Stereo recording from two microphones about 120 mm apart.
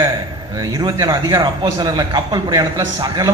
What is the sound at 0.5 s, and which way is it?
A man's voice, 30° right (ahead or behind).